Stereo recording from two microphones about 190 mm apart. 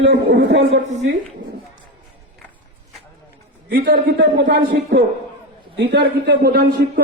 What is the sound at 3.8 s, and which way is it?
A man's voice, 70° right (ahead or behind).